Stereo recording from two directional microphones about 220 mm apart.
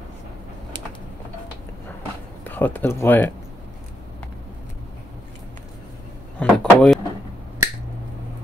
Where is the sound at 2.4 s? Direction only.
10° left (ahead or behind).